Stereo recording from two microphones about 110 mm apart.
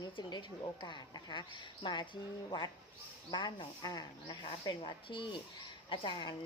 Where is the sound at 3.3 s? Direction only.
45° left (ahead or behind).